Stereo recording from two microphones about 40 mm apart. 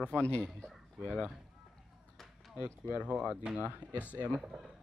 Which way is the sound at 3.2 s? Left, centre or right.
Centre.